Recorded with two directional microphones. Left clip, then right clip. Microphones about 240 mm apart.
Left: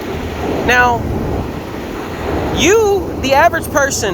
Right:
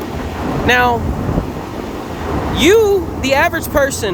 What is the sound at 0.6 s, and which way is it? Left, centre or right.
Speech, centre.